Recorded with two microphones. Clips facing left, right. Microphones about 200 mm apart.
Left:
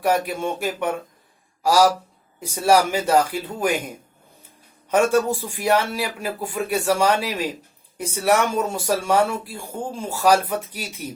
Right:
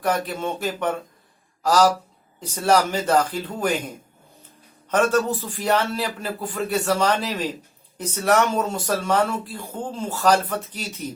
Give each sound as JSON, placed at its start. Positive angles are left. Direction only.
{"t": 0.0, "sound": "speech", "side_deg": 10}